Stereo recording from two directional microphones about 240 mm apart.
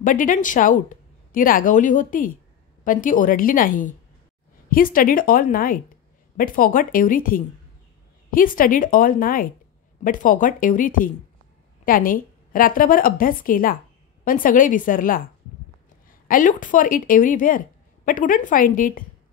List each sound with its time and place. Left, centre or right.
0.0 s speech: left